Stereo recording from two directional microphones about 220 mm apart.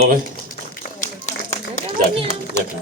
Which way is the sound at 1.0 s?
30° left (ahead or behind).